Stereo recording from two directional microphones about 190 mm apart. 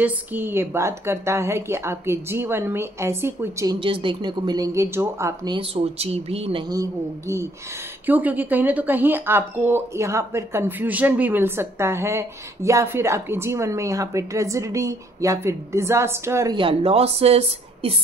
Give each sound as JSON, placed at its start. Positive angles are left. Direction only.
{"t": 0.0, "sound": "a woman's voice", "side_deg": -10}
{"t": 3.8, "sound": "a woman's voice", "side_deg": -25}
{"t": 6.7, "sound": "a woman's voice", "side_deg": -15}